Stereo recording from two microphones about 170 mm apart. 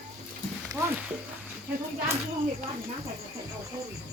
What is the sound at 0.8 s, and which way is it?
Speech, 15° right (ahead or behind).